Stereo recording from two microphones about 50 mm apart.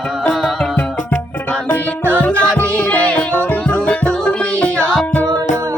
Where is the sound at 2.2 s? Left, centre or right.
Left.